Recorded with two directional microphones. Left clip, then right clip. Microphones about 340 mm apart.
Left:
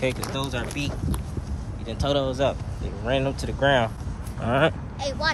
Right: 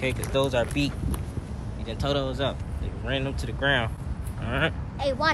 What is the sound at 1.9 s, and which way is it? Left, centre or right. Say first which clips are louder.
Speech: left 3 dB; centre.